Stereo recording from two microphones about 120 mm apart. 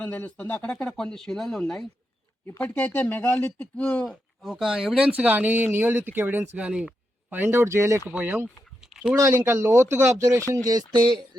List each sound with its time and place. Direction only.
0.0 s speech: 15° left (ahead or behind)
2.6 s speech: 15° left (ahead or behind); by 8.4 s 15° right (ahead or behind)
8.9 s a sound: 5° right (ahead or behind)
9.1 s speech: 20° right (ahead or behind); by 11.2 s 35° right (ahead or behind)